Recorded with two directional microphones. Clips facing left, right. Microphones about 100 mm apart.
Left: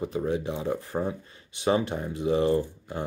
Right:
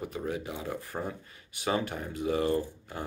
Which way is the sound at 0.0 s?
25° left (ahead or behind).